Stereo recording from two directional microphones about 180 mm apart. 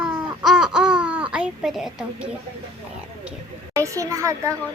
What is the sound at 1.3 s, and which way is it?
Speech, 5° right (ahead or behind).